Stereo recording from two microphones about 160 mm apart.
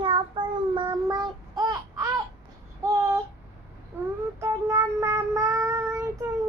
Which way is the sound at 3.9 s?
10° right (ahead or behind).